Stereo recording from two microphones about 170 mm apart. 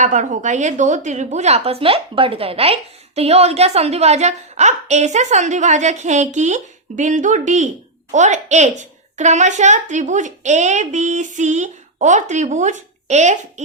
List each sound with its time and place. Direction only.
0.0 s a woman's voice: 45° right (ahead or behind)